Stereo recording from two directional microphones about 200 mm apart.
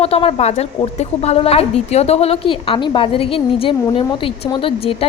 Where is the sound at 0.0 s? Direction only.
30° left (ahead or behind).